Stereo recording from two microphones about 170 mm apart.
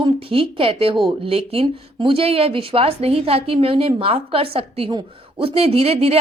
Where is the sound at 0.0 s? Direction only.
30° right (ahead or behind).